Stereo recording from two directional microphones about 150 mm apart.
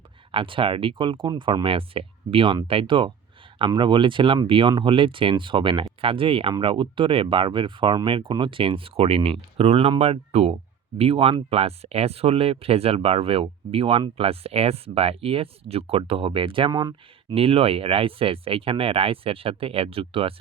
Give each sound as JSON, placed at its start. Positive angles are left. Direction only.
{"t": 0.3, "sound": "speech", "side_deg": -35}
{"t": 17.3, "sound": "speech", "side_deg": -40}